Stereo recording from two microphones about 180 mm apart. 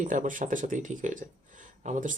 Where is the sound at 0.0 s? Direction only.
45° right (ahead or behind).